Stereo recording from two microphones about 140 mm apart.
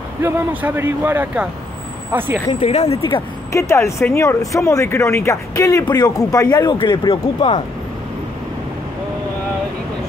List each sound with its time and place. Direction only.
0.2 s speech: 10° right (ahead or behind)
2.7 s speech: 50° left (ahead or behind)
3.5 s speech: 20° left (ahead or behind)